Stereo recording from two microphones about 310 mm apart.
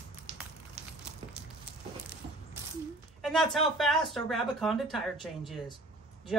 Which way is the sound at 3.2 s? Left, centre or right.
Centre.